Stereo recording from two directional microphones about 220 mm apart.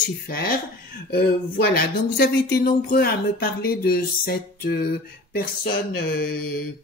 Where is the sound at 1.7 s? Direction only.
45° left (ahead or behind).